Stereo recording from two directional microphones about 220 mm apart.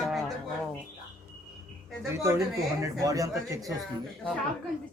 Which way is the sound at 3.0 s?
15° right (ahead or behind).